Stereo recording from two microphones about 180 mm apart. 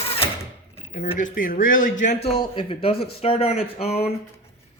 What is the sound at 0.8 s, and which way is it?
Speech, 35° left (ahead or behind).